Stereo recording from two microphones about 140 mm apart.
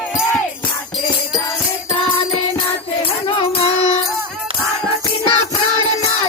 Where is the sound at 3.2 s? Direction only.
40° left (ahead or behind).